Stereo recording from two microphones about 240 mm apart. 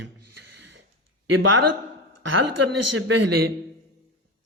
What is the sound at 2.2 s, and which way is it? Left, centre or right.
Speech, right.